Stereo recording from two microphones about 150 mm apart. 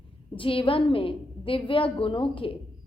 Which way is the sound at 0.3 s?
35° left (ahead or behind).